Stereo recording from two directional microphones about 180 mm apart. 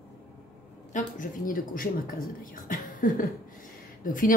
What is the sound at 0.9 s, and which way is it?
Speech, 50° left (ahead or behind).